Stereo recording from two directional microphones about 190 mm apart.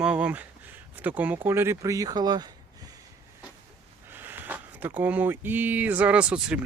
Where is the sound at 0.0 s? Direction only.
5° right (ahead or behind).